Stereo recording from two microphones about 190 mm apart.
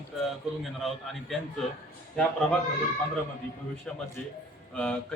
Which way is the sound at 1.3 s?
Centre (ahead or behind).